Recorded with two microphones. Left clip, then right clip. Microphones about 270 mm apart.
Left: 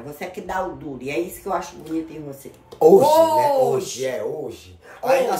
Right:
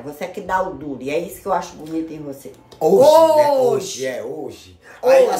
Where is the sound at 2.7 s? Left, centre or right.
Centre.